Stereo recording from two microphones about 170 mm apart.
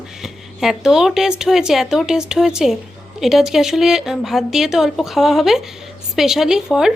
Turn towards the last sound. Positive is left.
turn(degrees=0)  # may be behind; listen again after turning